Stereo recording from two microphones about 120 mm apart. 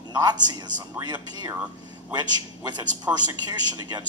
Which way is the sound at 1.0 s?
35° right (ahead or behind).